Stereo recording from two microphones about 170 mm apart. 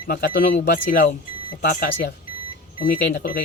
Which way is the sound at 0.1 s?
70° left (ahead or behind).